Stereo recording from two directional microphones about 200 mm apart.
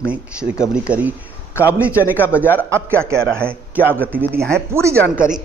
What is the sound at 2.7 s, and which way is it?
A man's voice, 15° right (ahead or behind).